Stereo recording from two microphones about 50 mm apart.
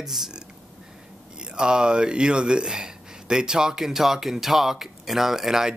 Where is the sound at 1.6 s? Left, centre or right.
Centre.